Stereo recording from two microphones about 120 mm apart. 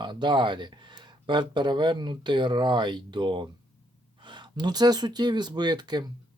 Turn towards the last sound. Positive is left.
turn(degrees=-35)  # may be behind; listen again after turning